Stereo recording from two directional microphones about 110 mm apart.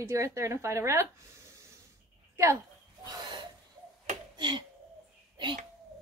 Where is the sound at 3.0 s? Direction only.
40° right (ahead or behind).